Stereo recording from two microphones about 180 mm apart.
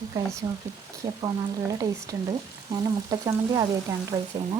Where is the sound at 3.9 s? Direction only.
15° right (ahead or behind).